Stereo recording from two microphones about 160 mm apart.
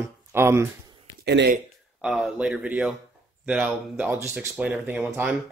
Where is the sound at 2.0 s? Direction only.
Centre (ahead or behind).